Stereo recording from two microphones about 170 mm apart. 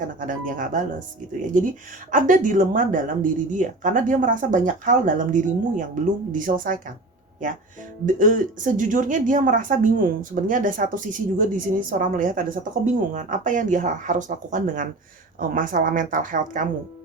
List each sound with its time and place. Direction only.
0.2 s speech: 50° right (ahead or behind)
2.1 s speech: 50° right (ahead or behind)
8.0 s speech: 50° right (ahead or behind)